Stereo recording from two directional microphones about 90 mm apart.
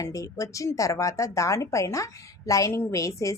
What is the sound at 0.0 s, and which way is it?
A woman's voice, 35° left (ahead or behind).